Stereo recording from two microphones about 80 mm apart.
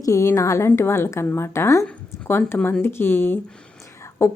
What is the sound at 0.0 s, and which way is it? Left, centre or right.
Speech, left.